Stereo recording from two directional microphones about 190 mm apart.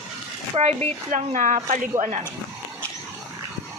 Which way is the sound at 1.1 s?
40° right (ahead or behind).